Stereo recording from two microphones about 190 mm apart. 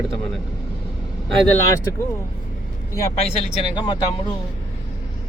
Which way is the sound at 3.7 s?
20° left (ahead or behind).